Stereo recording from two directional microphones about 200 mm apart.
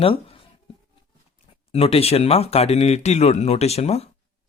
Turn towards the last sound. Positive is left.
turn(degrees=30)  # may be behind; listen again after turning